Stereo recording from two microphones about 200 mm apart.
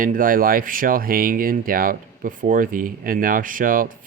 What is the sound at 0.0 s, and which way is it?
Speech, 45° right (ahead or behind).